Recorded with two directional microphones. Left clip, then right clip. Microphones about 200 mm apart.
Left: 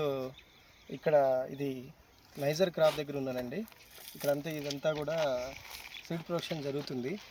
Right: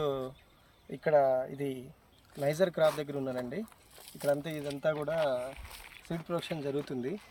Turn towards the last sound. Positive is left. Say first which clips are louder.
# right 2 dB
turn(degrees=20)  # may be behind; listen again after turning